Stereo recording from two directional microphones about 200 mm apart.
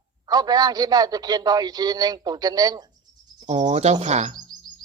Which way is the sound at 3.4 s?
35° right (ahead or behind).